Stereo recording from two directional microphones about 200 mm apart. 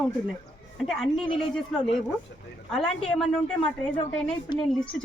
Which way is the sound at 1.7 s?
Centre (ahead or behind).